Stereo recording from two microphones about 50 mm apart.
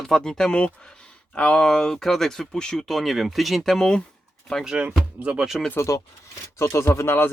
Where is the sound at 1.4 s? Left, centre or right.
Left.